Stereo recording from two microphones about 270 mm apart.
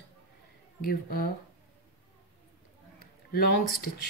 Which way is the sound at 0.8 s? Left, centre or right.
Left.